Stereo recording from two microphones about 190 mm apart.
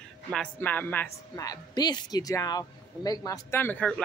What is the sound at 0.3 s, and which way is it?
A woman's voice, 5° left (ahead or behind).